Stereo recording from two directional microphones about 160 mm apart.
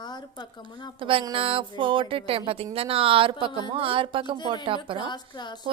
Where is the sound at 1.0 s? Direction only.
35° right (ahead or behind).